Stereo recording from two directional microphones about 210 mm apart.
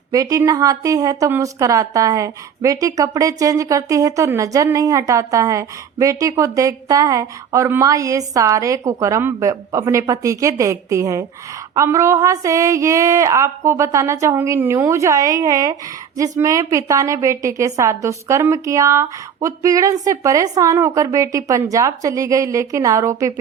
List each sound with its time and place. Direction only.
0.1 s a woman's voice: 15° right (ahead or behind)